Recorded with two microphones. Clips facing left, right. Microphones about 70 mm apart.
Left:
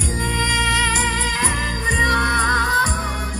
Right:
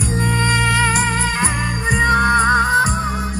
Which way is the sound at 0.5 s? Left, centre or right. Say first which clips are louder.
Right 2 dB; right.